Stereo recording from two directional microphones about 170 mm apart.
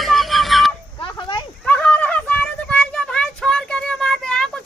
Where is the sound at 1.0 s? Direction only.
30° left (ahead or behind).